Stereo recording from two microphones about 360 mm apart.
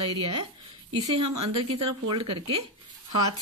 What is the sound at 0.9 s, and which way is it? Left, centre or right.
Speech, centre.